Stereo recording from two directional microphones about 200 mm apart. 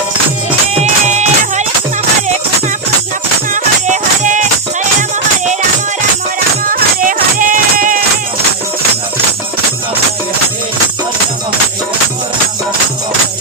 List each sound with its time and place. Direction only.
0.7 s music: 35° right (ahead or behind)
3.5 s music: 35° right (ahead or behind)
6.7 s music: 40° right (ahead or behind)